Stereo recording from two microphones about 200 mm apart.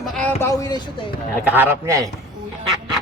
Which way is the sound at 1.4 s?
10° right (ahead or behind).